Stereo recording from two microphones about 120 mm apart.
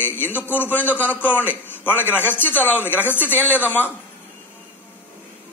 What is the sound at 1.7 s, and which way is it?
Speech, 15° left (ahead or behind).